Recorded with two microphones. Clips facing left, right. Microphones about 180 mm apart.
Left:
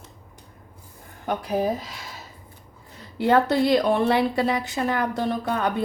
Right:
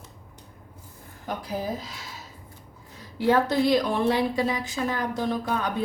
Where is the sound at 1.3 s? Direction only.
65° left (ahead or behind).